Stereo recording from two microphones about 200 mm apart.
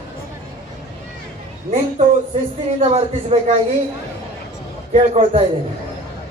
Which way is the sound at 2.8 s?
30° right (ahead or behind).